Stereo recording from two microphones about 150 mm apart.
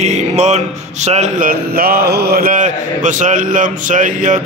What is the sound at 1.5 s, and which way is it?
Speech, 80° right.